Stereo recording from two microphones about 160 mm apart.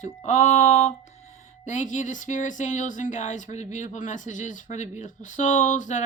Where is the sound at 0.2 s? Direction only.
45° left (ahead or behind).